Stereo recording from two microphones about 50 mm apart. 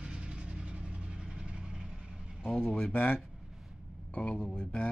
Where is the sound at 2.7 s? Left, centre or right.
Left.